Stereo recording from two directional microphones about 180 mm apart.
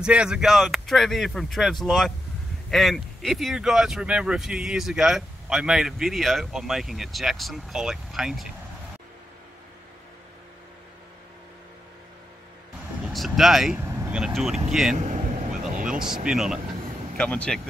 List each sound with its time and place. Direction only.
0.0 s speech: 5° right (ahead or behind)
13.0 s speech: centre (ahead or behind)
13.7 s speech: 15° right (ahead or behind)
15.0 s vehicle: 45° right (ahead or behind)
15.9 s speech: 5° right (ahead or behind)